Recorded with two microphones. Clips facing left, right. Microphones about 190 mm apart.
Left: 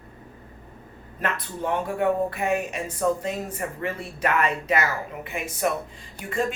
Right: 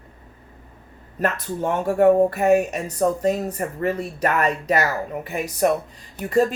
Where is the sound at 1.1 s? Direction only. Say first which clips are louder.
Right 6 dB; 40° right (ahead or behind).